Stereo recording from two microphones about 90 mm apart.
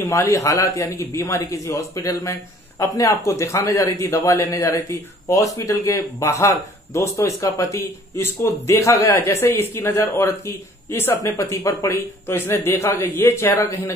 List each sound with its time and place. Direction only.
0.0 s speech: 35° left (ahead or behind)